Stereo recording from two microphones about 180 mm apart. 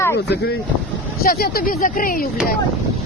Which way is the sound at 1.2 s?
55° left (ahead or behind).